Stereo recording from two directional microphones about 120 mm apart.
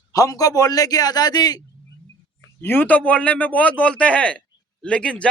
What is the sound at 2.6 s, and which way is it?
A man's voice, 15° left (ahead or behind).